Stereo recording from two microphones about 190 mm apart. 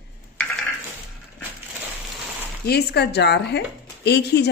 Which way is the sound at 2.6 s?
60° left (ahead or behind).